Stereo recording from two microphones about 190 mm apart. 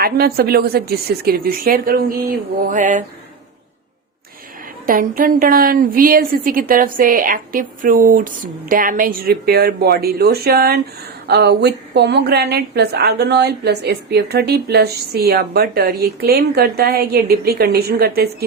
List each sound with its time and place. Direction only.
0.0 s a woman's voice: 55° right (ahead or behind)
2.6 s a sound: 40° right (ahead or behind)
4.9 s a woman's voice: 45° right (ahead or behind)